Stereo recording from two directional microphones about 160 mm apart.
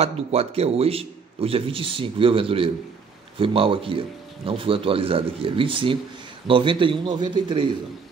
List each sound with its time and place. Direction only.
0.0 s a man's voice: 40° right (ahead or behind)